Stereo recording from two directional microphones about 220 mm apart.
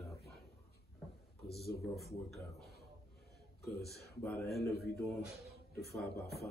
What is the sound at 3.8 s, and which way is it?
Speech, 5° left (ahead or behind).